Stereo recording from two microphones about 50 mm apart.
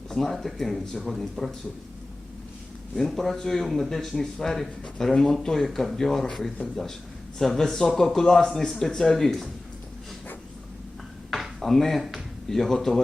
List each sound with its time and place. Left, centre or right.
0.1 s speech: centre
2.9 s a man's voice: centre
11.3 s speech: centre